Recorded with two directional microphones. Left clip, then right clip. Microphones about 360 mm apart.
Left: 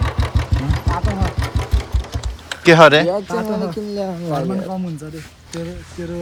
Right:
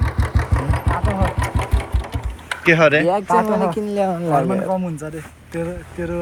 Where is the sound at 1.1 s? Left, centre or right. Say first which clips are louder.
Right 3 dB; centre.